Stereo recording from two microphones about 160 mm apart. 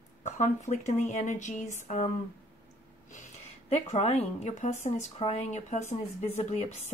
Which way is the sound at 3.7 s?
40° left (ahead or behind).